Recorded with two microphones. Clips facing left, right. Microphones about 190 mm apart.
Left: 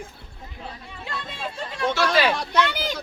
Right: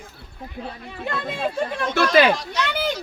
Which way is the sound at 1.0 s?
55° right (ahead or behind).